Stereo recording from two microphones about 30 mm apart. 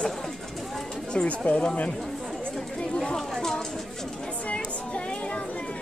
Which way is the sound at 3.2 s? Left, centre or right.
Centre.